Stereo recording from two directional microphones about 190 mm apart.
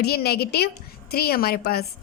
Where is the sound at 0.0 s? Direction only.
55° left (ahead or behind).